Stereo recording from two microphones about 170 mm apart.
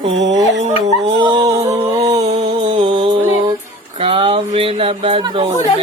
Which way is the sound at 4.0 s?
35° right (ahead or behind).